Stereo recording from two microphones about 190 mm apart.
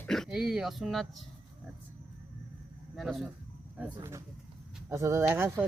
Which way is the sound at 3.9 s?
15° right (ahead or behind).